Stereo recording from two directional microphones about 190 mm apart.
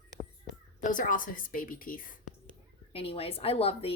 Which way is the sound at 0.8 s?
45° left (ahead or behind).